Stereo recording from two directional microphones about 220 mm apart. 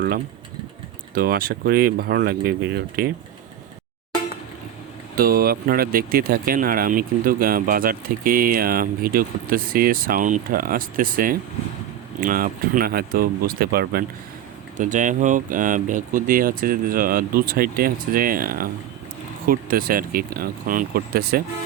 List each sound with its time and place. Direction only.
1.1 s speech: 40° right (ahead or behind)
5.1 s speech: 40° right (ahead or behind)